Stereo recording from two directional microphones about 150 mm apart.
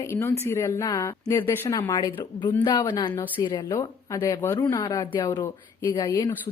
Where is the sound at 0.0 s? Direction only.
20° left (ahead or behind).